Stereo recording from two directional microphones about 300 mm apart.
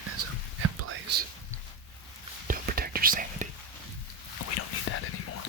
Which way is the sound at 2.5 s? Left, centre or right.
Right.